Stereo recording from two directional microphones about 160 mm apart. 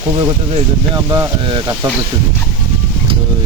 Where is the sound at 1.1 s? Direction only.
30° right (ahead or behind).